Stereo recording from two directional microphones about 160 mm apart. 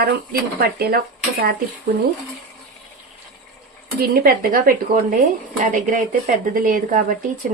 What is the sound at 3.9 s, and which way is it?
A woman's voice, 65° right (ahead or behind).